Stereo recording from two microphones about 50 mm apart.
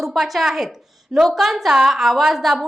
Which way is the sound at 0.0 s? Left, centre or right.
Centre.